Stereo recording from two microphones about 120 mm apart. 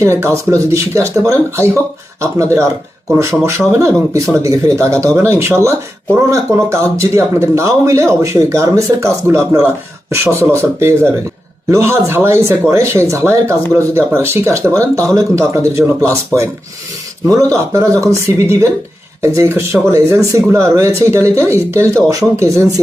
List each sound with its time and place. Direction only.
0.0 s speech: 25° right (ahead or behind)